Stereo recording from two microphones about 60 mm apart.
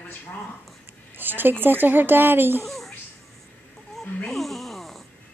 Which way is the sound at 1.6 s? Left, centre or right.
Right.